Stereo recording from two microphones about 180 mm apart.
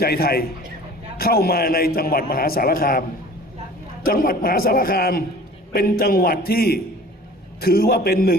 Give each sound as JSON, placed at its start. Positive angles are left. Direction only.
{"t": 0.0, "sound": "a man's voice", "side_deg": 60}
{"t": 4.0, "sound": "a man's voice", "side_deg": 55}